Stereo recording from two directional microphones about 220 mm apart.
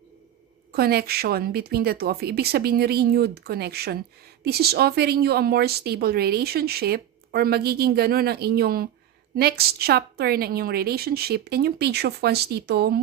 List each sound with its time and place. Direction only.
0.7 s speech: 45° right (ahead or behind)